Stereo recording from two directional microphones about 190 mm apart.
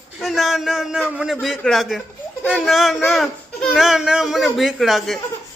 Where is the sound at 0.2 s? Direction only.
Centre (ahead or behind).